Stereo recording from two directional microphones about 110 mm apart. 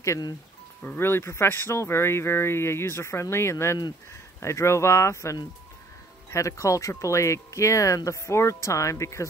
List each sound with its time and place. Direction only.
0.0 s speech: 30° left (ahead or behind)